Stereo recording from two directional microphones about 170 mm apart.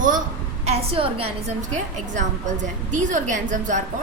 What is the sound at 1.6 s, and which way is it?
A woman's voice, 45° right (ahead or behind).